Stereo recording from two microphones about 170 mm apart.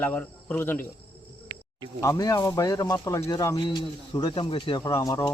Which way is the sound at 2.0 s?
20° left (ahead or behind).